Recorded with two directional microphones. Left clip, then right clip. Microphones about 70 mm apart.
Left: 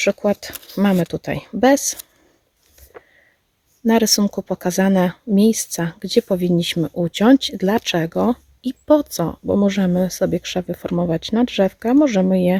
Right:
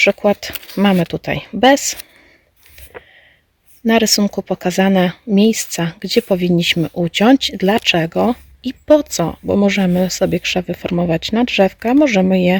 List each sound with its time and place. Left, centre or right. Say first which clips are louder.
0.0 s speech: right 5 dB; left
3.8 s speech: right 3 dB; left